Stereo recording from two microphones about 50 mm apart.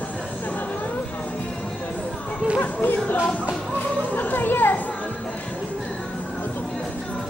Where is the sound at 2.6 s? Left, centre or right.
Left.